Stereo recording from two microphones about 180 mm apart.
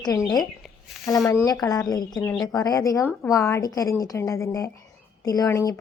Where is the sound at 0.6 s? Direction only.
Centre (ahead or behind).